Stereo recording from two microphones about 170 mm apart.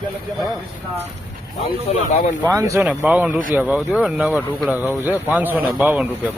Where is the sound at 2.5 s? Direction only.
20° right (ahead or behind).